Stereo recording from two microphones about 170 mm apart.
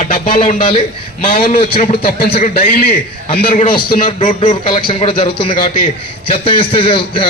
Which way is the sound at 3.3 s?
50° left (ahead or behind).